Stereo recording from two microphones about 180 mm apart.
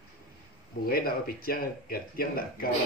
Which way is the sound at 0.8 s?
55° left (ahead or behind).